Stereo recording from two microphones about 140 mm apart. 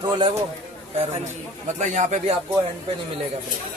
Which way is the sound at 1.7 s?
60° right (ahead or behind).